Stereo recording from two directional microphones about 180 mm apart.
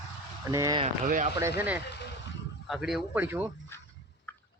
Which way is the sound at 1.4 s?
15° right (ahead or behind).